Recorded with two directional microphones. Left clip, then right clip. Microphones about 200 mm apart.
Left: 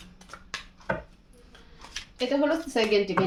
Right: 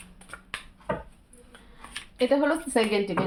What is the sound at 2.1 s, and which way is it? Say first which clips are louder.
Speech: right 2 dB; 35° right (ahead or behind).